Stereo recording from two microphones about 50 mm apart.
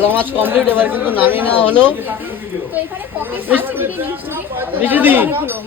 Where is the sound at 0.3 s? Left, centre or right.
Right.